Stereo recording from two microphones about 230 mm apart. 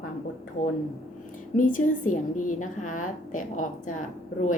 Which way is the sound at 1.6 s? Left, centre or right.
Left.